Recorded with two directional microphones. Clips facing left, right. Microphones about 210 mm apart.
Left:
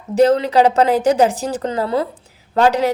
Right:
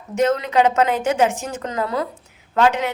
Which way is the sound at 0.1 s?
35° left (ahead or behind).